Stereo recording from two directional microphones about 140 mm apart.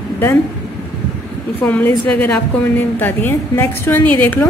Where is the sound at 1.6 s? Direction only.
10° left (ahead or behind).